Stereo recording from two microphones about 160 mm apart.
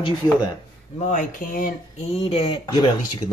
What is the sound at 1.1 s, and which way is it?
Speech, 60° left (ahead or behind).